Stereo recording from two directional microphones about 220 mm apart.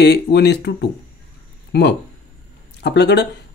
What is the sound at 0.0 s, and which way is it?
Speech, 50° left (ahead or behind).